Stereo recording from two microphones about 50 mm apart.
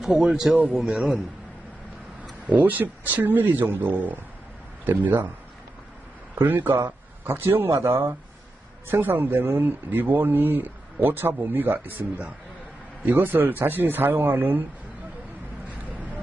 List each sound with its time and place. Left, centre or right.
0.0 s a man's voice: centre
2.5 s speech: right
6.3 s a man's voice: right
7.9 s speech: right
9.0 s speech: right